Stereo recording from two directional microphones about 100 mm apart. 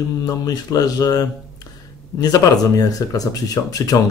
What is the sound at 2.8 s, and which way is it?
A man's voice, 40° left (ahead or behind).